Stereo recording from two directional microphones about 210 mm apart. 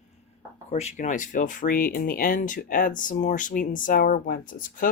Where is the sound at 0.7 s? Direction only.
30° left (ahead or behind).